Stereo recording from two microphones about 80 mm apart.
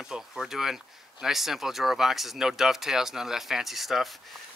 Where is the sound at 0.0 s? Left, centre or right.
Centre.